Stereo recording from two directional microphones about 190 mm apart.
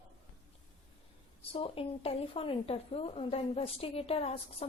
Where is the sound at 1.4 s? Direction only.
30° left (ahead or behind).